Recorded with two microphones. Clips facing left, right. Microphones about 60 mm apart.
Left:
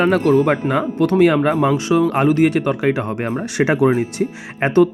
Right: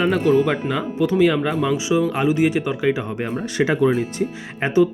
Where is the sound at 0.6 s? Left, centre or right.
Left.